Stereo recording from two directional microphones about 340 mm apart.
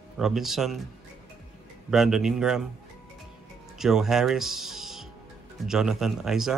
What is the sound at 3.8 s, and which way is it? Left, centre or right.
Speech, centre.